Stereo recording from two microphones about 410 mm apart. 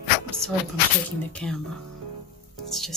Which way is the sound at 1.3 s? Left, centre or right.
Centre.